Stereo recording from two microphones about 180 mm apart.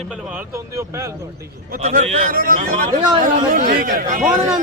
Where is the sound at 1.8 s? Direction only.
35° right (ahead or behind).